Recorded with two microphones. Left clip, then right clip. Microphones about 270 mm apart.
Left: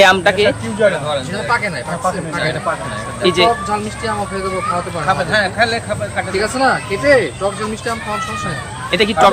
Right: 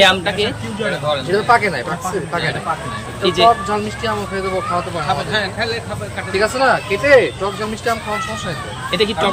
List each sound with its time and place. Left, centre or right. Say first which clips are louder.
0.0 s a man's voice: left 3 dB; centre
1.5 s speech: right 4 dB; centre
3.2 s a man's voice: even; centre
5.3 s a man's voice: left 5 dB; centre
6.3 s speech: right 2 dB; centre
8.9 s a man's voice: left 5 dB; centre